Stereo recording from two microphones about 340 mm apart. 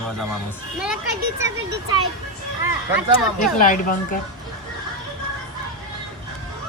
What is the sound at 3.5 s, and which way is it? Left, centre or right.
Speech, left.